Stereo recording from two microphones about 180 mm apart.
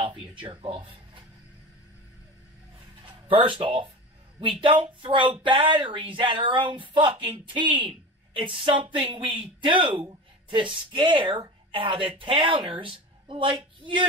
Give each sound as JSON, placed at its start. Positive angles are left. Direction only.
{"t": 0.0, "sound": "a sound", "side_deg": -30}
{"t": 0.4, "sound": "speech", "side_deg": -30}
{"t": 3.1, "sound": "speech", "side_deg": -30}